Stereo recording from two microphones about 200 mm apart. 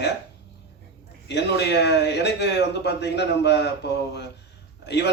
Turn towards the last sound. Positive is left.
turn(degrees=55)  # may be behind; listen again after turning